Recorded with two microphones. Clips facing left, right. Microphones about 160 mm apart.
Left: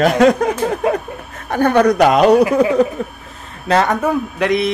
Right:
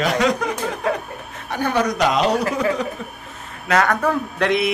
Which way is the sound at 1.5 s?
55° left (ahead or behind).